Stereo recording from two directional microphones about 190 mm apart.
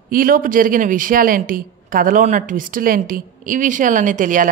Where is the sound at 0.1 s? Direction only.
50° right (ahead or behind).